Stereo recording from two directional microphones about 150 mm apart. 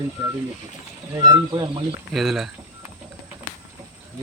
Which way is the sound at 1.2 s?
30° right (ahead or behind).